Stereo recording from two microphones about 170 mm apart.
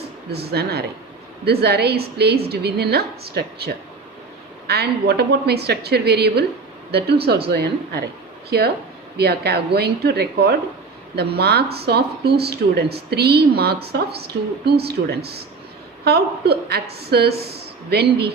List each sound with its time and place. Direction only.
0.3 s speech: 70° right (ahead or behind)